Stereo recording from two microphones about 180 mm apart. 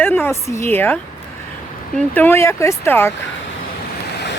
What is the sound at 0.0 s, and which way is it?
Speech, 10° left (ahead or behind).